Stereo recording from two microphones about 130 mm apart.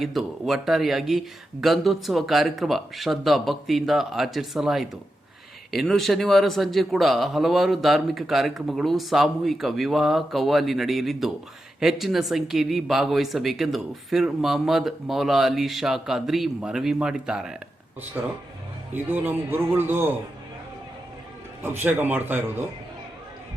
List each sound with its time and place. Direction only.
0.0 s a man's voice: centre (ahead or behind)
21.6 s a man's voice: 15° right (ahead or behind)